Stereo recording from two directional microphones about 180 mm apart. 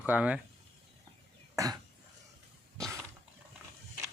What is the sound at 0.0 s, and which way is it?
Speech, 10° right (ahead or behind).